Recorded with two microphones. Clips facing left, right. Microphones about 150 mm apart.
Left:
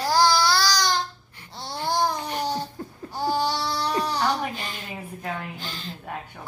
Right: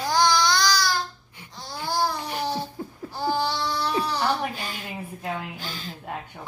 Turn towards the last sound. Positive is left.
turn(degrees=-5)  # may be behind; listen again after turning